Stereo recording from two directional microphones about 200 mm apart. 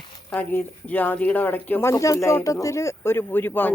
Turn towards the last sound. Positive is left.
turn(degrees=10)  # may be behind; listen again after turning